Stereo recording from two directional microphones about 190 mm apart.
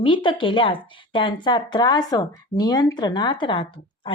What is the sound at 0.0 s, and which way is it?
A woman's voice, 25° left (ahead or behind).